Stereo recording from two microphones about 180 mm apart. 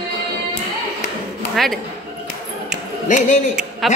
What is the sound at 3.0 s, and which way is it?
Speech, 45° left (ahead or behind).